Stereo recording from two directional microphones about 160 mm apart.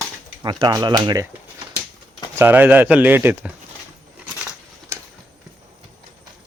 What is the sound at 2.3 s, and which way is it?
Speech, 10° right (ahead or behind).